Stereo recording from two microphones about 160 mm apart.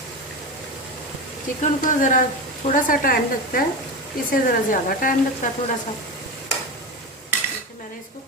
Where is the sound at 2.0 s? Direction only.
55° left (ahead or behind).